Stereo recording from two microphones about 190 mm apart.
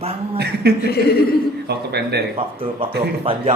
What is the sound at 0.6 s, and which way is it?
Speech, 60° right (ahead or behind).